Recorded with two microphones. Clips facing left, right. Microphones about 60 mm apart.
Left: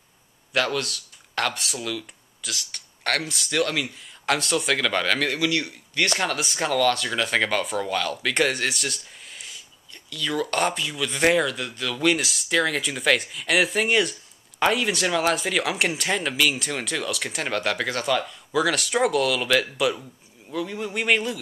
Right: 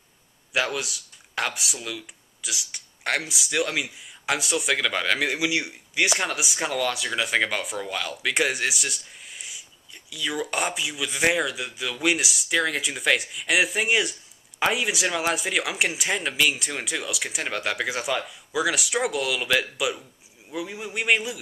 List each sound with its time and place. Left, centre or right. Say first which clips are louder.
0.5 s speech: left 2 dB; centre